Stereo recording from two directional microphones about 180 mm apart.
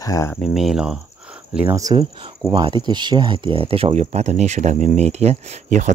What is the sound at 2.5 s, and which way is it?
Speech, 25° right (ahead or behind).